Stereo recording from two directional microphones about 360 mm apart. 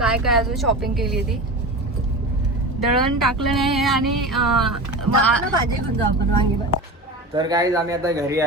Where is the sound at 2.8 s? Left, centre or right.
Right.